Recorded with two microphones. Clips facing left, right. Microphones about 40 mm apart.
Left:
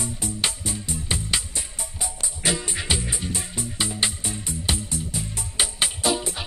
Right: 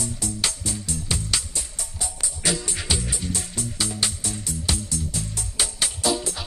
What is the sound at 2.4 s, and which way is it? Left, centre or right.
Music, centre.